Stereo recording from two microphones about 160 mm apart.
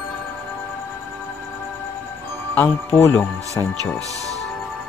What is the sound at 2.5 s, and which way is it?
Speech, 15° left (ahead or behind).